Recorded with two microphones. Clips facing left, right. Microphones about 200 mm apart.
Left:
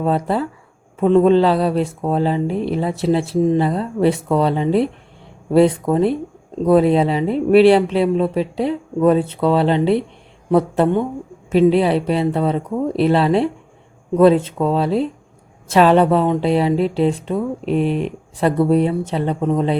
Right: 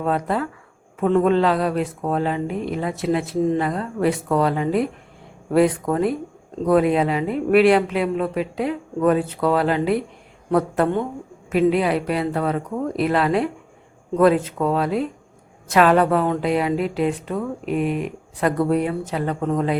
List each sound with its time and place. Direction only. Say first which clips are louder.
0.0 s speech: left 3 dB; 30° left (ahead or behind)